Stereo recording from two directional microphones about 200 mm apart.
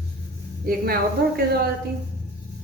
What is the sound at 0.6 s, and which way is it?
Speech, 50° right (ahead or behind).